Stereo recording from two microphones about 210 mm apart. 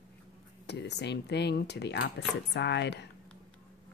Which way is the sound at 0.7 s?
55° left (ahead or behind).